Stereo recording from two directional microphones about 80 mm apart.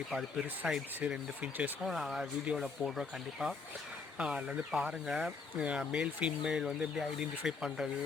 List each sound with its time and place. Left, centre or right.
0.1 s speech: centre
1.8 s speech: centre